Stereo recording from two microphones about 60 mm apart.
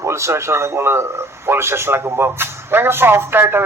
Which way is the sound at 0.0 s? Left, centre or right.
Right.